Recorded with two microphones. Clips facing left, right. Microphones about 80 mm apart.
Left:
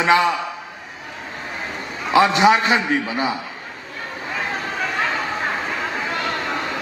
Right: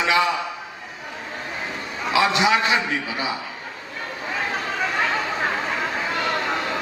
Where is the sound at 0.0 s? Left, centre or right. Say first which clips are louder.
Left 4 dB; left.